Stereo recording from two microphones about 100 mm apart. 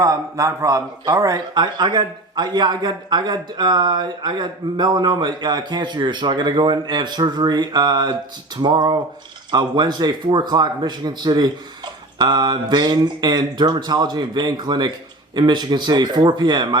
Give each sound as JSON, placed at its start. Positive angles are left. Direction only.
{"t": 0.0, "sound": "speech", "side_deg": -35}